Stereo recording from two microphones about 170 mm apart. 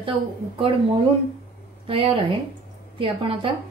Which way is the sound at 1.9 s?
30° right (ahead or behind).